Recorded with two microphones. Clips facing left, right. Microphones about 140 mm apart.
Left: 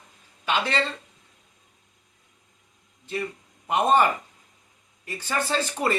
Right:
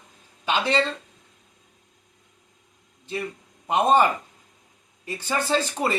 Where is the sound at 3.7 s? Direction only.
20° right (ahead or behind).